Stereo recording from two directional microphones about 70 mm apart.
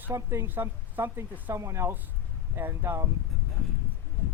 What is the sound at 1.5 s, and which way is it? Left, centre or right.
Speech, right.